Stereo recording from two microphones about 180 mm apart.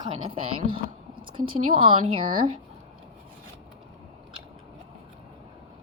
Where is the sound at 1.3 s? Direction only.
30° right (ahead or behind).